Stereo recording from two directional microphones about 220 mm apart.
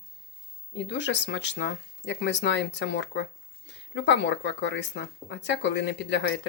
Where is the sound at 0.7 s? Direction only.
55° left (ahead or behind).